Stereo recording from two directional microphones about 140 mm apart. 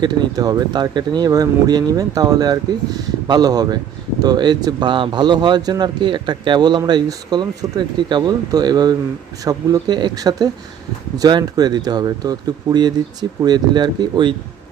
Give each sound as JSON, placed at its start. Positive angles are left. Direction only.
{"t": 0.0, "sound": "speech", "side_deg": -30}